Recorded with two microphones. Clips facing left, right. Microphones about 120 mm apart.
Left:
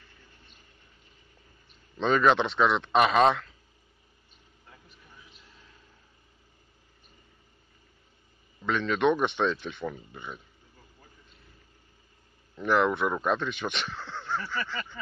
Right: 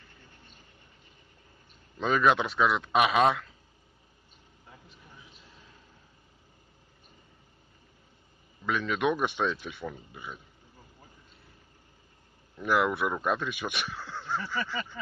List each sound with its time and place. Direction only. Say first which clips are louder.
2.0 s speech: left 2 dB; 5° right (ahead or behind)
8.6 s speech: left 3 dB; 10° right (ahead or behind)
12.5 s speech: left 2 dB; 10° right (ahead or behind)